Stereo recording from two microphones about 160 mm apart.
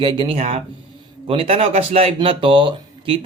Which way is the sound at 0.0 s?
30° right (ahead or behind).